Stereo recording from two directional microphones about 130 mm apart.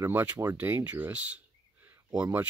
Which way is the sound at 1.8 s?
15° right (ahead or behind).